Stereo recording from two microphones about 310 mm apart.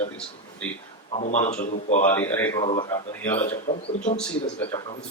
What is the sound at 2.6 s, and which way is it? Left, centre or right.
Speech, centre.